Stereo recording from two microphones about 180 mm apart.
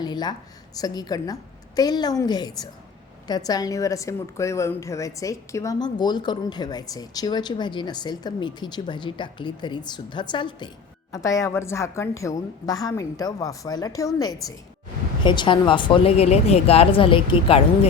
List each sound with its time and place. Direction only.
0.0 s a woman's voice: 25° left (ahead or behind)